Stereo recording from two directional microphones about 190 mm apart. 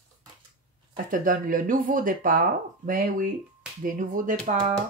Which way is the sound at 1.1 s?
45° right (ahead or behind).